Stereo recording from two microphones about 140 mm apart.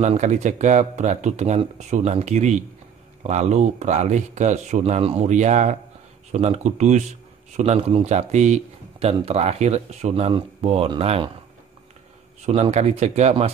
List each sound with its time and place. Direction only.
0.0 s speech: 55° right (ahead or behind)
12.4 s speech: 50° right (ahead or behind)